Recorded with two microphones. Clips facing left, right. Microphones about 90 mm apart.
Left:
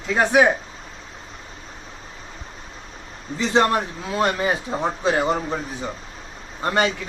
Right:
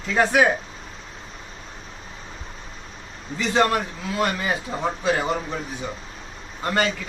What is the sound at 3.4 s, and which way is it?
A man's voice, 30° left (ahead or behind).